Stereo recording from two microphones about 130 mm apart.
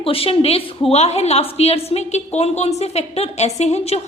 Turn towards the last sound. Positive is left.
turn(degrees=55)  # may be behind; listen again after turning